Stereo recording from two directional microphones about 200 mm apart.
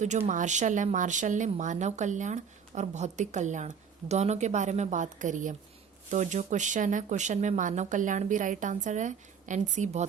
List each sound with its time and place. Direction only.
0.0 s speech: 35° right (ahead or behind)